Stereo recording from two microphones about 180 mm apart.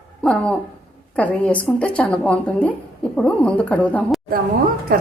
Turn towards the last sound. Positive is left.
turn(degrees=-55)  # may be behind; listen again after turning